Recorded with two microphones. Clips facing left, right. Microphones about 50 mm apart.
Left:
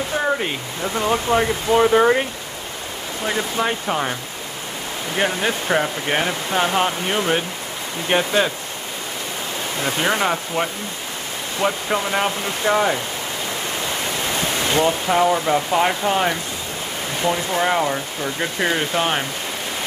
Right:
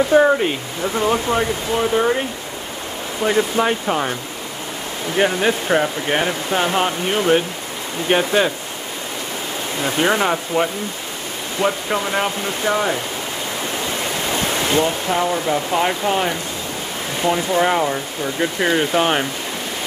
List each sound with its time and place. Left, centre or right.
0.4 s speech: centre
1.4 s speech: centre
3.3 s speech: centre
9.8 s speech: centre
14.7 s speech: centre